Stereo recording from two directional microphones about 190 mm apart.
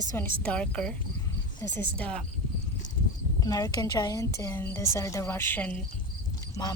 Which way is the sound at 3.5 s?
20° left (ahead or behind).